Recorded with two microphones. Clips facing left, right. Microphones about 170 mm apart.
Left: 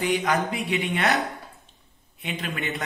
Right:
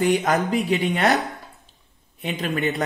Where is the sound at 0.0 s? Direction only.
45° right (ahead or behind).